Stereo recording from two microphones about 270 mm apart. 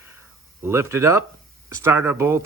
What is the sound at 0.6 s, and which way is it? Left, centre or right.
Speech, centre.